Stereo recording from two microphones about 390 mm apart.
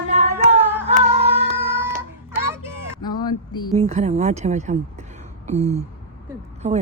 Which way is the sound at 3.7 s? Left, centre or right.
Centre.